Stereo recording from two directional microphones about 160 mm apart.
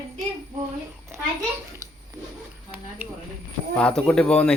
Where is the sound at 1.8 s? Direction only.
20° right (ahead or behind).